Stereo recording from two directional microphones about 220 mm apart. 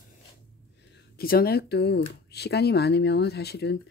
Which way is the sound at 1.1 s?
45° left (ahead or behind).